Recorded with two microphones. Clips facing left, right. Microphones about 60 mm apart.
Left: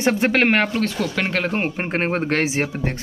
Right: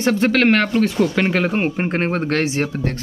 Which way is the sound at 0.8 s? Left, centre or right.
Centre.